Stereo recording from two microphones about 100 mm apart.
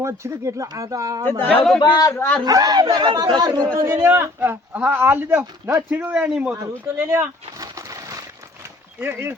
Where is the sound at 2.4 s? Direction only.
40° right (ahead or behind).